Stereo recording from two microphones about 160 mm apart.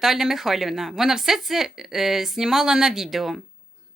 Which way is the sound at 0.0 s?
Centre (ahead or behind).